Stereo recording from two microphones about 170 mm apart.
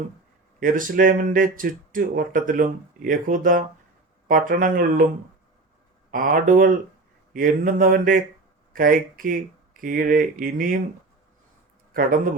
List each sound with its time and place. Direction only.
0.6 s speech: 55° right (ahead or behind)
6.1 s speech: 55° right (ahead or behind)
11.9 s speech: 55° right (ahead or behind)